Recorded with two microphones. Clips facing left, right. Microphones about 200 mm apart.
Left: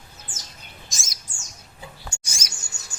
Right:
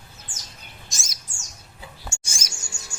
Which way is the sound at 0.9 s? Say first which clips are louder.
Even; centre (ahead or behind).